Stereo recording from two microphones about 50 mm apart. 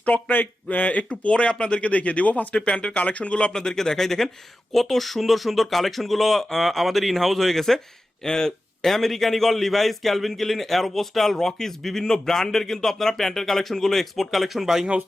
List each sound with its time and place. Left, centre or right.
0.0 s a man's voice: left; by 14.8 s centre